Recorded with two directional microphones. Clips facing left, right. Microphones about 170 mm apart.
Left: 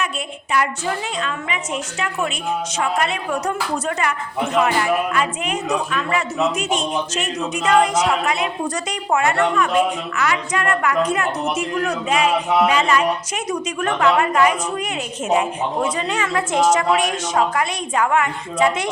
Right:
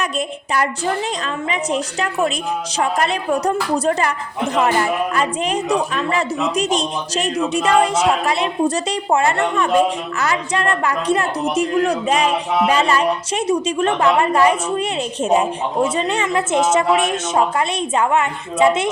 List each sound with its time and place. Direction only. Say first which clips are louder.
1.2 s a woman's voice: right 3 dB; 35° right (ahead or behind)